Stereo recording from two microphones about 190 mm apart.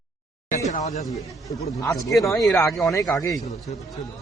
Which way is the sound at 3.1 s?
15° left (ahead or behind).